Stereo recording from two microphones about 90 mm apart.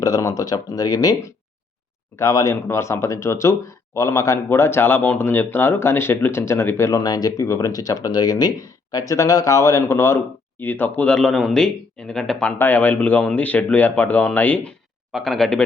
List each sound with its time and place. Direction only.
0.0 s speech: 40° left (ahead or behind)
7.0 s speech: 45° left (ahead or behind); by 11.1 s 20° left (ahead or behind)
11.1 s speech: 5° left (ahead or behind)
12.5 s speech: 20° left (ahead or behind)
15.1 s speech: 5° left (ahead or behind)